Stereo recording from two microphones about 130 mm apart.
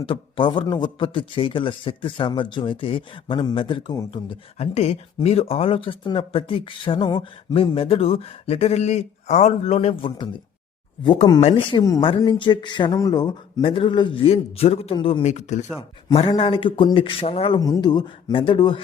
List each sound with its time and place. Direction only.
0.0 s a man's voice: 40° left (ahead or behind)
4.5 s a man's voice: 55° left (ahead or behind); by 11.3 s 35° left (ahead or behind)
11.3 s a man's voice: 45° left (ahead or behind)
14.9 s a man's voice: 40° left (ahead or behind)
15.2 s speech: 60° left (ahead or behind)
16.4 s a man's voice: 45° left (ahead or behind)
17.6 s a man's voice: 30° left (ahead or behind)